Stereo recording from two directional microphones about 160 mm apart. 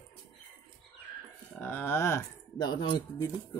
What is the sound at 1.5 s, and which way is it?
Speech, 10° left (ahead or behind).